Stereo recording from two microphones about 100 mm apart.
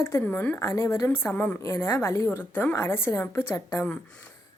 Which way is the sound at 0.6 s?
35° left (ahead or behind).